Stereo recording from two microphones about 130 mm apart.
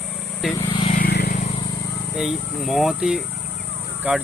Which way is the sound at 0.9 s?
80° left.